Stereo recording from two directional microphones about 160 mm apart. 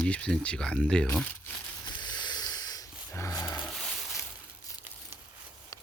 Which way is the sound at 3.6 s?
Centre (ahead or behind).